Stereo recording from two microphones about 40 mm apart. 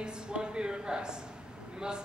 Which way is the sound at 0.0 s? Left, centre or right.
Right.